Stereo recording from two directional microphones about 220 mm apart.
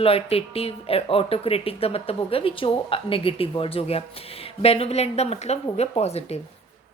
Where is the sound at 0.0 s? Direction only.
25° left (ahead or behind).